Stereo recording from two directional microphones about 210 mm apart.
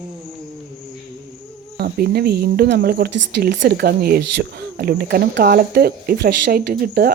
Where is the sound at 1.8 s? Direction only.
50° right (ahead or behind).